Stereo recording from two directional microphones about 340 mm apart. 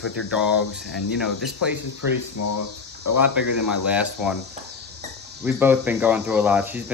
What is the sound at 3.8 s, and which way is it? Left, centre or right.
Speech, centre.